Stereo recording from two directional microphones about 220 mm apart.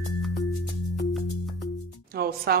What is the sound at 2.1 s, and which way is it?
Music, 45° right (ahead or behind).